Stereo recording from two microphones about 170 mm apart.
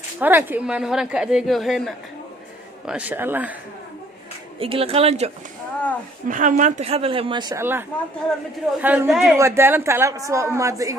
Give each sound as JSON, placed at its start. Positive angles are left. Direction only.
{"t": 0.2, "sound": "a woman's voice", "side_deg": -10}
{"t": 4.6, "sound": "a woman's voice", "side_deg": -35}
{"t": 6.2, "sound": "a woman's voice", "side_deg": -50}
{"t": 7.6, "sound": "speech", "side_deg": -15}
{"t": 9.3, "sound": "speech", "side_deg": -15}